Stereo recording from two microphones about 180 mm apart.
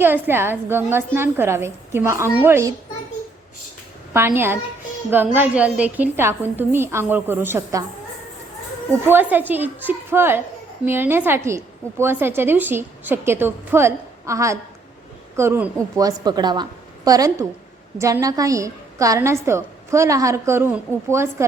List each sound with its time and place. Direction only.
0.0 s a woman's voice: 10° right (ahead or behind)
4.1 s a woman's voice: 15° right (ahead or behind)
9.3 s a woman's voice: 10° right (ahead or behind)